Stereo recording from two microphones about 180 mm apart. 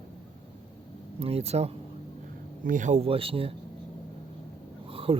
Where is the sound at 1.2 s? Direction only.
35° right (ahead or behind).